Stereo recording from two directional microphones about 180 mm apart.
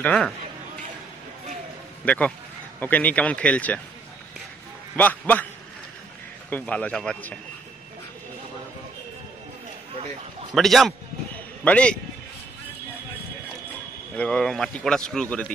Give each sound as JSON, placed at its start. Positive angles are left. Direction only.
{"t": 0.0, "sound": "speech", "side_deg": 5}
{"t": 2.0, "sound": "speech", "side_deg": 10}
{"t": 4.9, "sound": "speech", "side_deg": 10}
{"t": 6.5, "sound": "speech", "side_deg": 5}
{"t": 10.5, "sound": "a sound", "side_deg": 0}
{"t": 14.1, "sound": "a man's voice", "side_deg": 5}